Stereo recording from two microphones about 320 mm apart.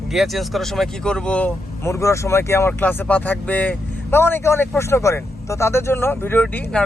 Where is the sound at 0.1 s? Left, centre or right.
Centre.